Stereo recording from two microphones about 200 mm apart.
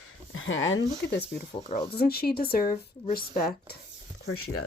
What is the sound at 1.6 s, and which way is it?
Speech, 35° left (ahead or behind).